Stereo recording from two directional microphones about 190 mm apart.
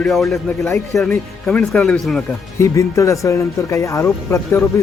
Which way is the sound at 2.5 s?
15° left (ahead or behind).